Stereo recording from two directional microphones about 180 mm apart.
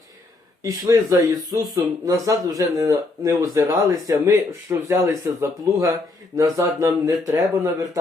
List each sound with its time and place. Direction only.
0.6 s speech: 20° right (ahead or behind)